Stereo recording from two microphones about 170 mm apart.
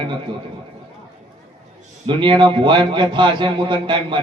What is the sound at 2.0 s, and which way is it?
A man's voice, 30° right (ahead or behind).